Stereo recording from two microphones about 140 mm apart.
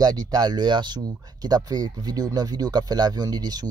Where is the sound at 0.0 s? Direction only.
30° right (ahead or behind).